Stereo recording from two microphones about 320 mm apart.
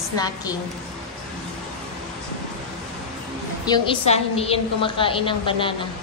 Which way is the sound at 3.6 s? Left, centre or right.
Centre.